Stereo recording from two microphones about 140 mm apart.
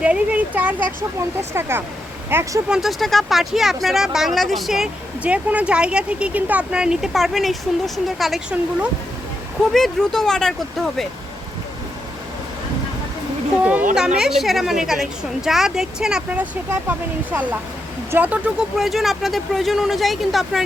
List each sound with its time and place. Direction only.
0.0 s speech: 10° right (ahead or behind)
2.6 s speech: 5° right (ahead or behind)
13.6 s speech: 10° right (ahead or behind)